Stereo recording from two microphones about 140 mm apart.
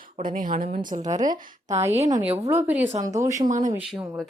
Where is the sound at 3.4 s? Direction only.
65° right (ahead or behind).